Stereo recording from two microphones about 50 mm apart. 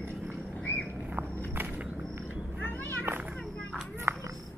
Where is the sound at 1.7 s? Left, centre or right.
Right.